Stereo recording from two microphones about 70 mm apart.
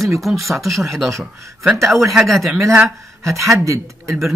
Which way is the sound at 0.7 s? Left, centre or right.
Right.